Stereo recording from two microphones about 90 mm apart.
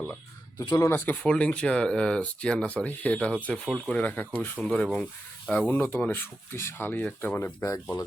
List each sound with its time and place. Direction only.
0.8 s speech: 25° left (ahead or behind); by 4.0 s 10° left (ahead or behind)
4.0 s speech: 20° left (ahead or behind)
7.3 s speech: 35° left (ahead or behind)